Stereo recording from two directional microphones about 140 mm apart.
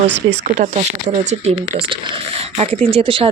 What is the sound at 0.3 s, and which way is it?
Speech, 55° right (ahead or behind).